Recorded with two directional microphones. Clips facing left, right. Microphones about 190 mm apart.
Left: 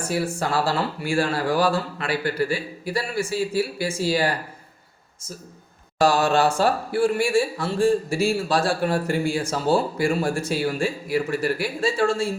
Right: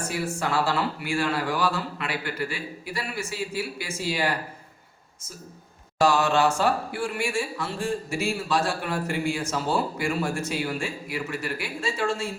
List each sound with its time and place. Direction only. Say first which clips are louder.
0.3 s a man's voice: left 2 dB; 35° left (ahead or behind)
6.0 s a man's voice: left 2 dB; 35° left (ahead or behind)